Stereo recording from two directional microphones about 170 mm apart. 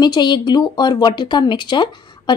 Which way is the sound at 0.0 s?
25° left (ahead or behind).